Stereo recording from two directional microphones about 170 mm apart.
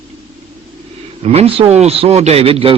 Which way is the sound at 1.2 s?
40° right (ahead or behind).